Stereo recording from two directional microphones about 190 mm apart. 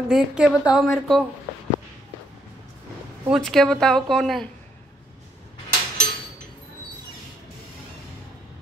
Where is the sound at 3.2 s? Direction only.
Centre (ahead or behind).